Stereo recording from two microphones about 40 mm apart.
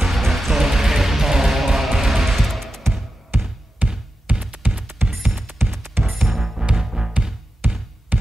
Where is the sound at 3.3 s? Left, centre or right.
Right.